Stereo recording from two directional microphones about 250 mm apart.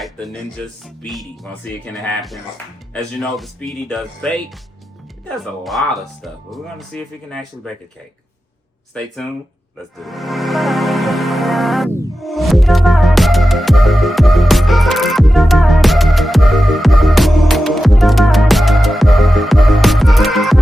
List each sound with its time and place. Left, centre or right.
0.0 s music: centre
1.0 s speech: centre
5.6 s speech: centre
8.9 s speech: centre
10.0 s music: centre